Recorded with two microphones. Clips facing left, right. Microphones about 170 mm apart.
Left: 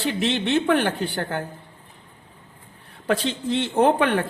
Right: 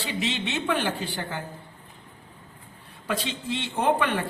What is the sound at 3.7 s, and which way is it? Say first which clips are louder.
Speech: left 5 dB; 55° left (ahead or behind).